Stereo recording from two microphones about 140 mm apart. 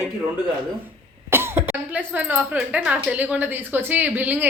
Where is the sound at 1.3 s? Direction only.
15° right (ahead or behind).